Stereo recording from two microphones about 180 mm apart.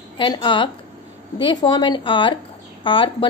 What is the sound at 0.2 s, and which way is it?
A woman's voice, 25° left (ahead or behind).